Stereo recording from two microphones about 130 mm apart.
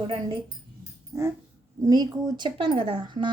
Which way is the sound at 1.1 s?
25° right (ahead or behind).